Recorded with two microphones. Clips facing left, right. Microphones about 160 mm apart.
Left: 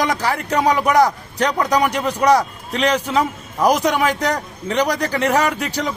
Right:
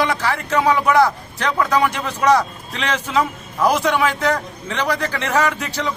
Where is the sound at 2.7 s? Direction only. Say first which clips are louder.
Left 6 dB; 40° left (ahead or behind).